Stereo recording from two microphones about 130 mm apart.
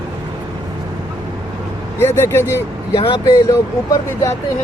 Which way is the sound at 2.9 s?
35° left (ahead or behind).